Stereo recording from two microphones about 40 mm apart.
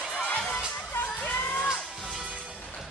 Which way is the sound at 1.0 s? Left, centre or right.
Left.